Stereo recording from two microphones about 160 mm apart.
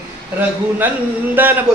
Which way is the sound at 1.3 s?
10° right (ahead or behind).